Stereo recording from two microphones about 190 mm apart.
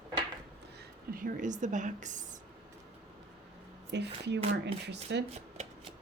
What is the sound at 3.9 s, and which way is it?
Speech, 65° right (ahead or behind).